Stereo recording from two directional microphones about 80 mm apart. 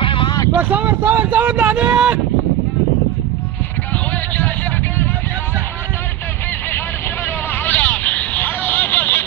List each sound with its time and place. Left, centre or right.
0.0 s vehicle: left
0.6 s speech: right
7.6 s vehicle: left